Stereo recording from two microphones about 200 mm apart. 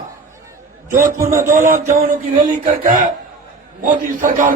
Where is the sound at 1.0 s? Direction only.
15° right (ahead or behind).